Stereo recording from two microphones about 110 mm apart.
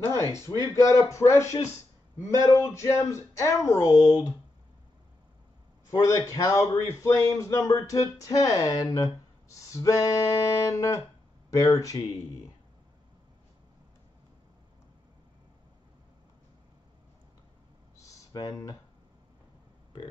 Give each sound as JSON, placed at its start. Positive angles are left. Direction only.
{"t": 0.5, "sound": "speech", "side_deg": 30}
{"t": 5.9, "sound": "a man's voice", "side_deg": 30}
{"t": 18.0, "sound": "a sound", "side_deg": 35}